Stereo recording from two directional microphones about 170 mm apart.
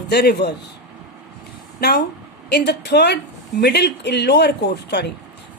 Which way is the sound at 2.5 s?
90° left.